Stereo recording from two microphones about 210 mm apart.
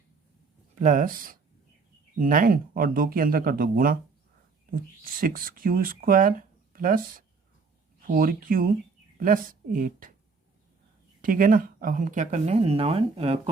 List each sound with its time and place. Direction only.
0.8 s speech: 40° right (ahead or behind)
11.2 s speech: 40° right (ahead or behind)